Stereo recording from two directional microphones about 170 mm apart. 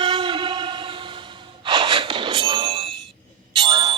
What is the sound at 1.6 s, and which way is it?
Gasp, 30° right (ahead or behind).